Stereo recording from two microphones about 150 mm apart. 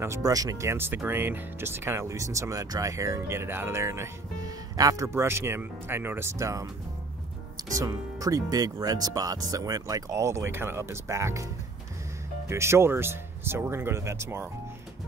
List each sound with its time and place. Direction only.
0.0 s speech: 20° right (ahead or behind)
7.7 s speech: 20° right (ahead or behind)
12.4 s speech: 20° right (ahead or behind)